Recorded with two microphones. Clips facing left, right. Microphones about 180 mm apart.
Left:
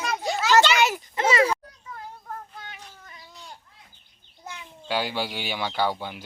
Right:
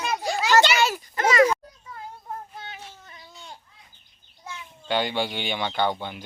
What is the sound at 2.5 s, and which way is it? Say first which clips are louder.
Child singing: right 3 dB; 25° right (ahead or behind).